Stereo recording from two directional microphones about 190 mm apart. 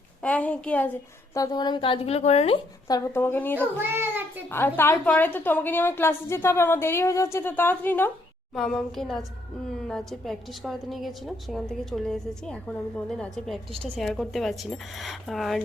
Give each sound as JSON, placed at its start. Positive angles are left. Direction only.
{"t": 0.2, "sound": "a woman's voice", "side_deg": 10}
{"t": 1.3, "sound": "a woman's voice", "side_deg": 20}
{"t": 2.8, "sound": "a woman's voice", "side_deg": 15}
{"t": 3.8, "sound": "child singing", "side_deg": -10}
{"t": 4.5, "sound": "a woman's voice", "side_deg": 10}